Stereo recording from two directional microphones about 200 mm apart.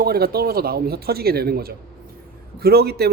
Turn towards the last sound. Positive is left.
turn(degrees=-55)  # may be behind; listen again after turning